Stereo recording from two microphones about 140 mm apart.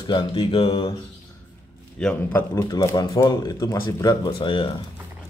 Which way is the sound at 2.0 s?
10° left (ahead or behind).